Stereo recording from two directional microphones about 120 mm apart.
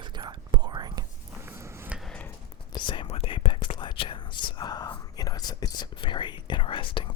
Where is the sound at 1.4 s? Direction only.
20° right (ahead or behind).